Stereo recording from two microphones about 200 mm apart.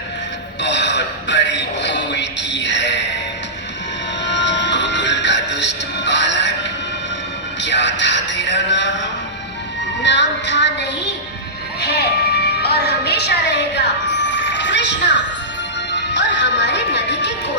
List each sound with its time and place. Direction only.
0.6 s a sound: 60° left (ahead or behind)
4.2 s music: 60° left (ahead or behind)
7.6 s a woman's voice: 60° left (ahead or behind)
11.8 s music: 55° left (ahead or behind)
16.1 s music: 60° left (ahead or behind)